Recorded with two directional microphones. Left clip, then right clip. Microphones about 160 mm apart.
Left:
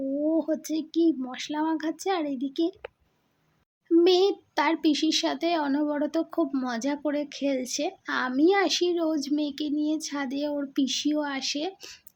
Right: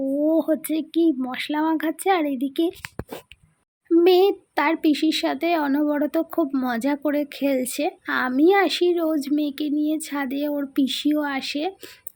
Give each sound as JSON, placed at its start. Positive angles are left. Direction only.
{"t": 0.3, "sound": "speech", "side_deg": -25}